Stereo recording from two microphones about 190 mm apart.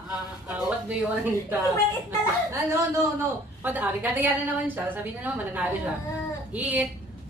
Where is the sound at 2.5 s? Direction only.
15° right (ahead or behind).